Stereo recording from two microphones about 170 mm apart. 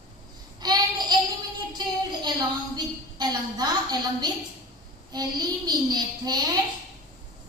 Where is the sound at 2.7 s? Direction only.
25° right (ahead or behind).